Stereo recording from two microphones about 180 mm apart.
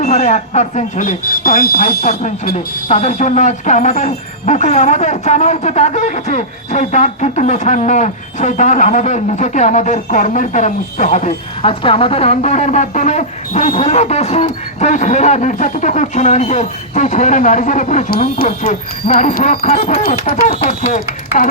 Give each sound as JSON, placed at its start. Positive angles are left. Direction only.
{"t": 0.0, "sound": "speech", "side_deg": 40}
{"t": 2.0, "sound": "speech", "side_deg": 45}
{"t": 18.1, "sound": "speech", "side_deg": 55}
{"t": 18.4, "sound": "speech", "side_deg": 40}